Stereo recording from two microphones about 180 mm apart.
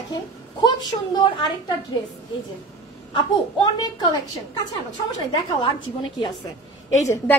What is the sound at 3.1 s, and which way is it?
A woman's voice, 25° left (ahead or behind).